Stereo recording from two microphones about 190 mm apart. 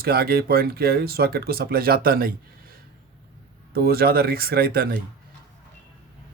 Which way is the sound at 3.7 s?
55° right (ahead or behind).